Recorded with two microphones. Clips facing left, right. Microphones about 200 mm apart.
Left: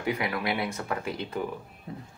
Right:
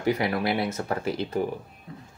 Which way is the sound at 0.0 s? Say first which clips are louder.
Right 5 dB; 35° right (ahead or behind).